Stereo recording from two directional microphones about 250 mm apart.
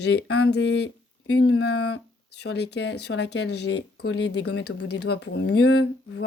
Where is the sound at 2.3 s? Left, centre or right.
Left.